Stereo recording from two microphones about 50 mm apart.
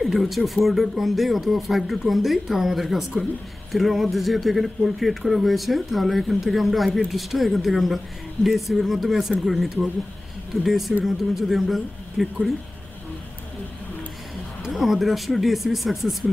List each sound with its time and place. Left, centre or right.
0.0 s speech: centre
14.7 s speech: centre